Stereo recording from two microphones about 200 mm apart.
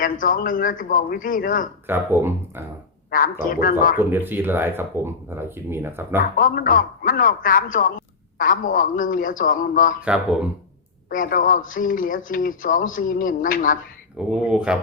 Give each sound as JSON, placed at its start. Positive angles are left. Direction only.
{"t": 0.0, "sound": "speech", "side_deg": 45}
{"t": 1.9, "sound": "speech", "side_deg": -10}
{"t": 3.1, "sound": "speech", "side_deg": 45}
{"t": 3.9, "sound": "speech", "side_deg": -10}
{"t": 6.3, "sound": "speech", "side_deg": 45}
{"t": 11.1, "sound": "speech", "side_deg": 45}
{"t": 14.2, "sound": "speech", "side_deg": -5}